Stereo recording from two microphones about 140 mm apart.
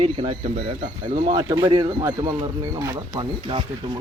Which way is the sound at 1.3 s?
30° right (ahead or behind).